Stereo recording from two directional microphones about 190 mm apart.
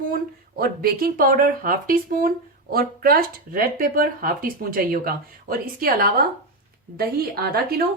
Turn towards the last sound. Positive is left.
turn(degrees=-55)  # may be behind; listen again after turning